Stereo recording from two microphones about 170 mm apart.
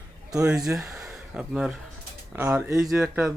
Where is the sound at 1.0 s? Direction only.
5° right (ahead or behind).